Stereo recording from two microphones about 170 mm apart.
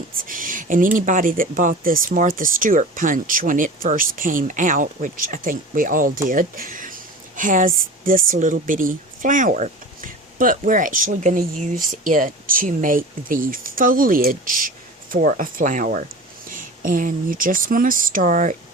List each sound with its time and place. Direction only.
0.3 s speech: 50° right (ahead or behind)